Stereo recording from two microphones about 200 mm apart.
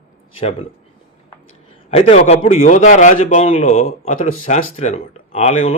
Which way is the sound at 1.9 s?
30° left (ahead or behind).